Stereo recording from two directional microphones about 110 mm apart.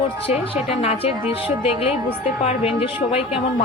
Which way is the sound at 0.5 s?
70° left (ahead or behind).